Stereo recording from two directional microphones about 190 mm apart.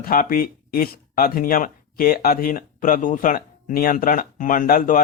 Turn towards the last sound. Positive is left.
turn(degrees=45)  # may be behind; listen again after turning